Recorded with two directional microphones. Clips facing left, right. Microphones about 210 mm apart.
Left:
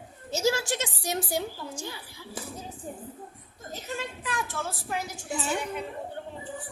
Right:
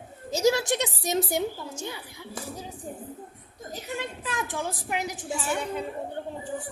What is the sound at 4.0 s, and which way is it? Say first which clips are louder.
A woman's voice: right 1 dB; 20° right (ahead or behind).